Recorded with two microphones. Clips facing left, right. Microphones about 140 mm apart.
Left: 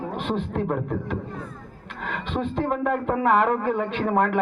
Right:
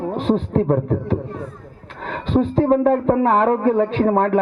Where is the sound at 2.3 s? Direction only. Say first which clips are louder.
Right 10 dB; 35° right (ahead or behind).